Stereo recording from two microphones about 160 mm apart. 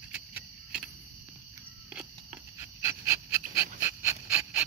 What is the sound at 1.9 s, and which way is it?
Pant, 15° right (ahead or behind).